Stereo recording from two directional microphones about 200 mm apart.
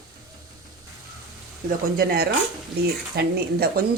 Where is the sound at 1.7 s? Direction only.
50° right (ahead or behind).